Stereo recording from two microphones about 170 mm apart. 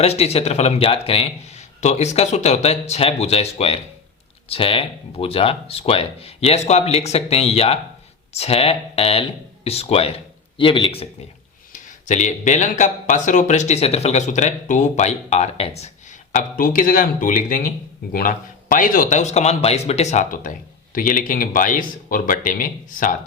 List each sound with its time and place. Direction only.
0.0 s speech: 40° left (ahead or behind)
11.7 s speech: 45° left (ahead or behind)